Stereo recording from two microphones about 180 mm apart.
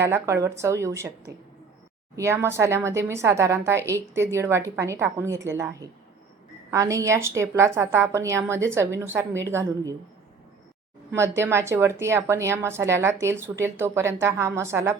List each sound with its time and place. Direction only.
0.0 s speech: 15° right (ahead or behind)
2.1 s speech: 15° right (ahead or behind)
11.1 s speech: 15° right (ahead or behind)